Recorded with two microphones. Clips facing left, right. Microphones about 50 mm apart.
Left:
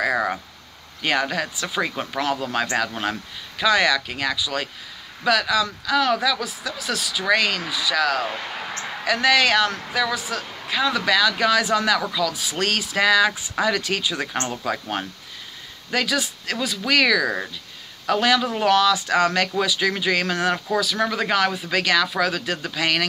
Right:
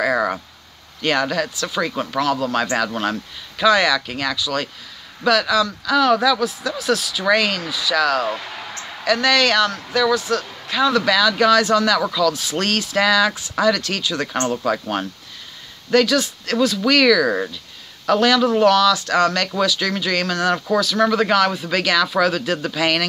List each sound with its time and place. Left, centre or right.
0.0 s vehicle: centre
1.0 s speech: centre
18.7 s speech: centre